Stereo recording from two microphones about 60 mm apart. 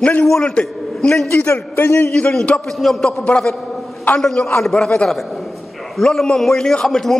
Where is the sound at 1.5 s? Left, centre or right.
Left.